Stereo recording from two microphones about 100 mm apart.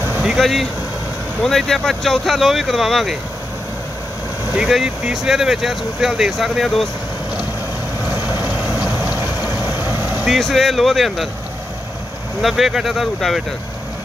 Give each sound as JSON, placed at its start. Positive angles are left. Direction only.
{"t": 0.2, "sound": "vehicle", "side_deg": 0}
{"t": 1.4, "sound": "speech", "side_deg": 5}
{"t": 4.6, "sound": "speech", "side_deg": -5}
{"t": 8.1, "sound": "vehicle", "side_deg": -20}
{"t": 10.2, "sound": "speech", "side_deg": 0}
{"t": 12.4, "sound": "speech", "side_deg": 0}